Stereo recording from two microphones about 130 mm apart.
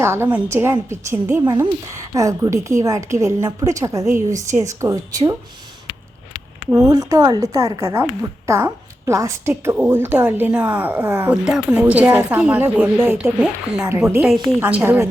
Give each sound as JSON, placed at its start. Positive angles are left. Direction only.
{"t": 0.0, "sound": "a woman's voice", "side_deg": -20}
{"t": 6.7, "sound": "a woman's voice", "side_deg": -25}
{"t": 13.4, "sound": "a woman's voice", "side_deg": -5}